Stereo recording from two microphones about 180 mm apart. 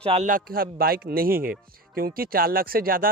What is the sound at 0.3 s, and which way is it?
Speech, 50° right (ahead or behind).